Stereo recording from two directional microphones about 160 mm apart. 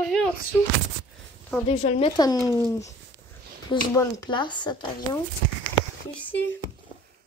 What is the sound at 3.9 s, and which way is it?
Speech, 25° left (ahead or behind).